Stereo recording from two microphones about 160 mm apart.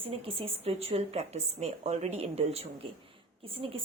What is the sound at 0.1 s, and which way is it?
A woman's voice, 35° right (ahead or behind).